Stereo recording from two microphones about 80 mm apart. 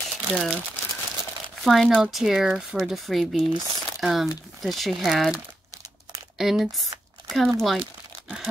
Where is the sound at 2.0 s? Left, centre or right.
Centre.